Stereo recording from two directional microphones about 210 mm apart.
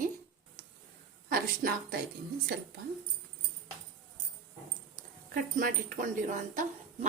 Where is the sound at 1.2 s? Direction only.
45° right (ahead or behind).